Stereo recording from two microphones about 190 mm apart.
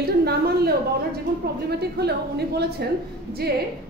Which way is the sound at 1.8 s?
60° right (ahead or behind).